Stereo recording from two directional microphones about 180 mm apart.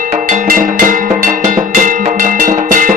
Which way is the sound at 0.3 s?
50° right (ahead or behind).